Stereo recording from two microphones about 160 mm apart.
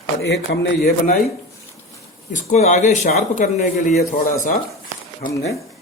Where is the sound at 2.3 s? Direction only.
50° left (ahead or behind).